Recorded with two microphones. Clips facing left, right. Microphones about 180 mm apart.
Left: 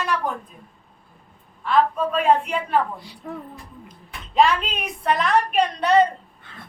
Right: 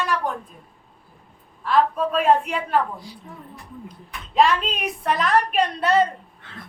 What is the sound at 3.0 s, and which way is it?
Speech, 65° left (ahead or behind).